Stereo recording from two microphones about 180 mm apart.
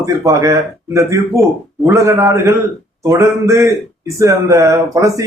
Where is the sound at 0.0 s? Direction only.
15° right (ahead or behind).